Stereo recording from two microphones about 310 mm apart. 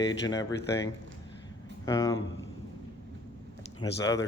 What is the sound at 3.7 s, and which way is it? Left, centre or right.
Speech, centre.